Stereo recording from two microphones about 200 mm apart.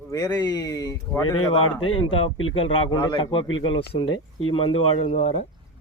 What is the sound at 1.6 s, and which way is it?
Speech, 90° left.